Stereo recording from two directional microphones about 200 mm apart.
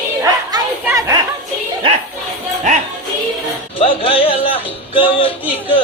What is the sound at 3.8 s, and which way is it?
Music, 30° left (ahead or behind).